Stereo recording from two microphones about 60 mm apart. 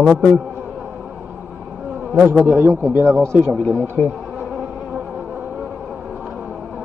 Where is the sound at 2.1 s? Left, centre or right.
Right.